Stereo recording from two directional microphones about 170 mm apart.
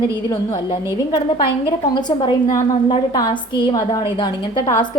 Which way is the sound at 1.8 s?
25° left (ahead or behind).